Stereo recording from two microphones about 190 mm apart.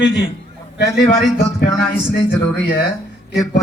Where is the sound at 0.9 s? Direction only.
50° left (ahead or behind).